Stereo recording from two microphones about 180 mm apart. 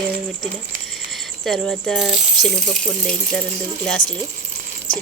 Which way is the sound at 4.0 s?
50° left (ahead or behind).